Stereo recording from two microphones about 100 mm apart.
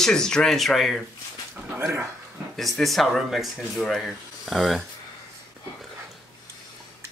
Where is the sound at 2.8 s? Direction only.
Centre (ahead or behind).